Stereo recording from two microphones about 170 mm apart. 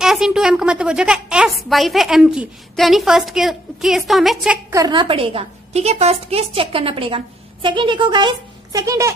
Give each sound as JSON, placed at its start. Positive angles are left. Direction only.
{"t": 0.0, "sound": "a woman's voice", "side_deg": -5}
{"t": 4.6, "sound": "a woman's voice", "side_deg": -20}